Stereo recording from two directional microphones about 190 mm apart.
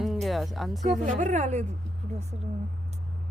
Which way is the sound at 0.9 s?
40° right (ahead or behind).